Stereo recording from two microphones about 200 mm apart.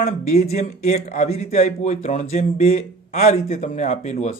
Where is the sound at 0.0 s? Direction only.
35° left (ahead or behind).